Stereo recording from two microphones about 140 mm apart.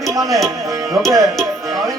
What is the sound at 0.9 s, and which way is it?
Speech, centre (ahead or behind).